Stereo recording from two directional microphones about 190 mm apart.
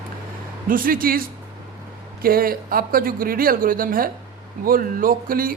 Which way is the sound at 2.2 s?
50° right (ahead or behind).